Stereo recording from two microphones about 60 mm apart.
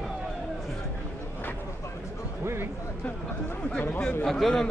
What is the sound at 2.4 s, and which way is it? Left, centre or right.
Speech, right.